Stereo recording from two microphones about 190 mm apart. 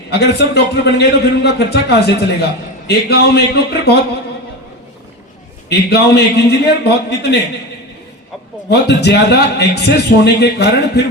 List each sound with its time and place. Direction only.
0.1 s a man's voice: 60° left (ahead or behind)
5.6 s a man's voice: 60° left (ahead or behind)
8.7 s a man's voice: 60° left (ahead or behind)